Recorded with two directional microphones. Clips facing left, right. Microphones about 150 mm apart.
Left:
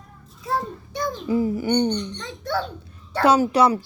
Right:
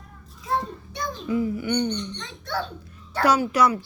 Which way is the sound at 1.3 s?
35° left (ahead or behind).